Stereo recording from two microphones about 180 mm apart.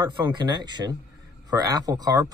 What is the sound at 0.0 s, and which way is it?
Speech, 25° right (ahead or behind).